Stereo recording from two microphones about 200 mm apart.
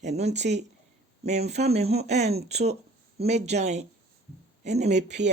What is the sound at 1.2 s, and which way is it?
Speech, 35° right (ahead or behind).